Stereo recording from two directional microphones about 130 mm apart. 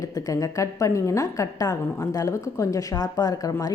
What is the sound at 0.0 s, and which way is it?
A woman's voice, 25° left (ahead or behind).